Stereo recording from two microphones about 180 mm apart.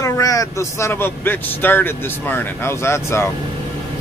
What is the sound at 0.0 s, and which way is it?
Speech, 20° left (ahead or behind).